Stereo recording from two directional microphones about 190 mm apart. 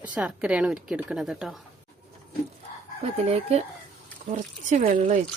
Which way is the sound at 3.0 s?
35° right (ahead or behind).